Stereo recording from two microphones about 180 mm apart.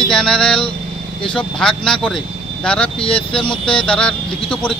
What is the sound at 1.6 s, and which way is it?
Speech, 5° left (ahead or behind).